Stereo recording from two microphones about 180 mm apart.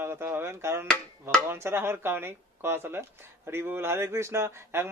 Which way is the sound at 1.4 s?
15° right (ahead or behind).